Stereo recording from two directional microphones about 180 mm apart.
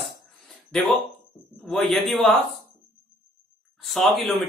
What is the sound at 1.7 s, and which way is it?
Speech, centre (ahead or behind).